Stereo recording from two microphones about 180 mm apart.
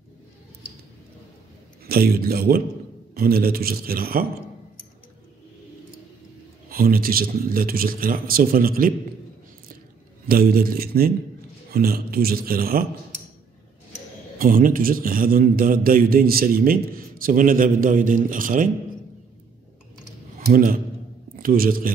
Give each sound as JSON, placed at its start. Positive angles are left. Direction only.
{"t": 1.9, "sound": "a man's voice", "side_deg": -55}
{"t": 6.7, "sound": "a man's voice", "side_deg": -55}
{"t": 10.2, "sound": "a man's voice", "side_deg": -55}
{"t": 14.4, "sound": "a man's voice", "side_deg": -50}
{"t": 20.3, "sound": "a man's voice", "side_deg": -50}